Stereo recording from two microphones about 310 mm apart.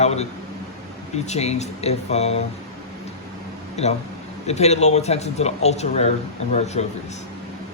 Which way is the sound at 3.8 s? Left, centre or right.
Left.